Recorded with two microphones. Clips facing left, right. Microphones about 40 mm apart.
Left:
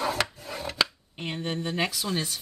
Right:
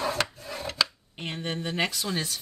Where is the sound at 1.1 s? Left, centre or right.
Centre.